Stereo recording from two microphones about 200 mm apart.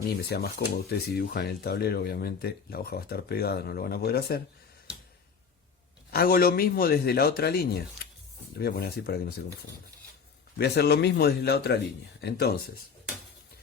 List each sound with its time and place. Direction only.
0.2 s speech: 55° left (ahead or behind)
6.1 s speech: 50° left (ahead or behind)
10.6 s speech: 55° left (ahead or behind)